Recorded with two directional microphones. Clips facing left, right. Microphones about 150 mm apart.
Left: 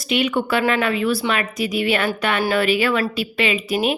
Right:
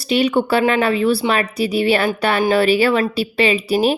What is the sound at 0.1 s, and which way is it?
A woman's voice, 35° right (ahead or behind).